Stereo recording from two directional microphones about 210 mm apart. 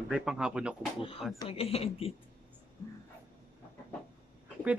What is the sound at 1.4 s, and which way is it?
Speech, 30° left (ahead or behind).